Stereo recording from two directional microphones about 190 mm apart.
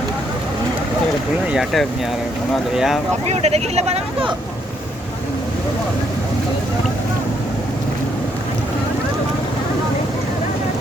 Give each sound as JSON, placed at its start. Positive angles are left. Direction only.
{"t": 1.5, "sound": "speech", "side_deg": 0}
{"t": 3.2, "sound": "speech", "side_deg": -35}